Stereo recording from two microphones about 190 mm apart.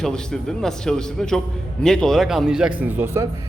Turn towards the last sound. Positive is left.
turn(degrees=-15)  # may be behind; listen again after turning